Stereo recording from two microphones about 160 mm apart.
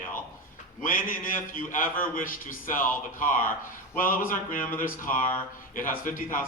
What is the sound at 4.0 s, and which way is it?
Speech, 60° left (ahead or behind).